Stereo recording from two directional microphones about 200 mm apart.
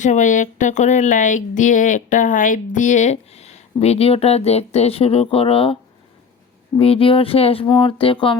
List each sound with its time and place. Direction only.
0.0 s speech: 40° left (ahead or behind)
6.7 s speech: 30° left (ahead or behind)